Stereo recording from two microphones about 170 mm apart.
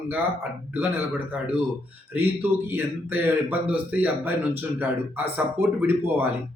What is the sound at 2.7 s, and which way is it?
Speech, 10° right (ahead or behind).